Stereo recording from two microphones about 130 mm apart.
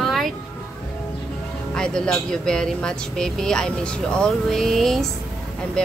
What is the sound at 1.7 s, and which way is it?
Speech, 5° left (ahead or behind).